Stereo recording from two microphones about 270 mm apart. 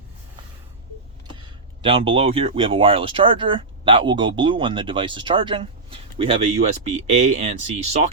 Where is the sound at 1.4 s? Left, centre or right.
Centre.